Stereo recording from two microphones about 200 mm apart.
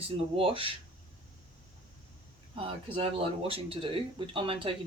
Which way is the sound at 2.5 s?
30° right (ahead or behind).